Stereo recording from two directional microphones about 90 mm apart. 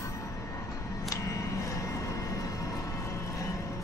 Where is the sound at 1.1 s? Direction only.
35° left (ahead or behind).